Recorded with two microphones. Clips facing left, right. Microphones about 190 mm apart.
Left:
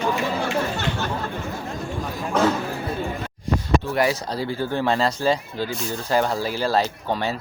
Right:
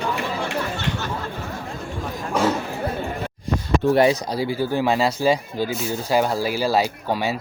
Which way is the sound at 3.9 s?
25° right (ahead or behind).